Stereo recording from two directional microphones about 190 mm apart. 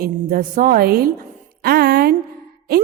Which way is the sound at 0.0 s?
50° right (ahead or behind).